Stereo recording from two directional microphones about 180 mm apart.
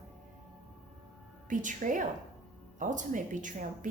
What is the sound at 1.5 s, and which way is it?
A woman's voice, 45° right (ahead or behind).